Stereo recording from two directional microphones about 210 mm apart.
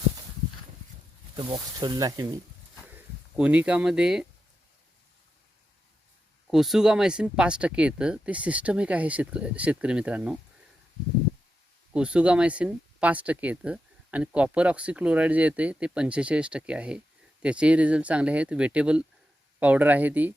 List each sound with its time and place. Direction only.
1.4 s speech: 20° right (ahead or behind)
3.3 s speech: 5° right (ahead or behind)
6.5 s speech: centre (ahead or behind)
11.9 s speech: 5° right (ahead or behind)